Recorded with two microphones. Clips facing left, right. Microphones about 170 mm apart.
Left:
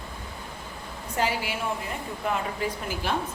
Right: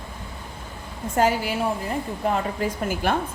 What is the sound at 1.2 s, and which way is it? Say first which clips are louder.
A woman's voice: right 6 dB; 45° right (ahead or behind).